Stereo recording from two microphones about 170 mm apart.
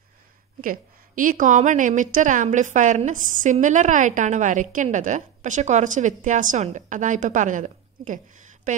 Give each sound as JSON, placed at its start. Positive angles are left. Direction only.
{"t": 0.6, "sound": "a woman's voice", "side_deg": -55}